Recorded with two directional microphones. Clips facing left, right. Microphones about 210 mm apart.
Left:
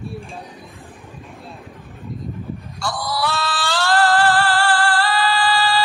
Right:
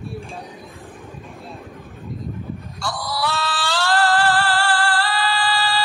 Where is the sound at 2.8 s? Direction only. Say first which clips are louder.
Left 2 dB; 50° left (ahead or behind).